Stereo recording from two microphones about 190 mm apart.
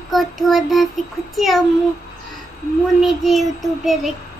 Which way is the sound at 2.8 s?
Centre (ahead or behind).